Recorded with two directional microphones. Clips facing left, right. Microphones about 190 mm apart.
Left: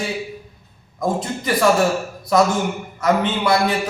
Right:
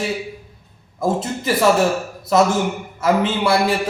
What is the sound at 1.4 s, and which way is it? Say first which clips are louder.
Speech: right 1 dB; 5° right (ahead or behind).